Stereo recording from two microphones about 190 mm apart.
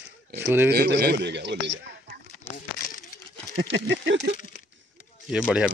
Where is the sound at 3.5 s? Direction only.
70° right (ahead or behind).